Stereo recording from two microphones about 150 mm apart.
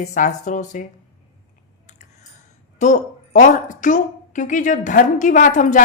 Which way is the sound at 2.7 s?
55° left (ahead or behind).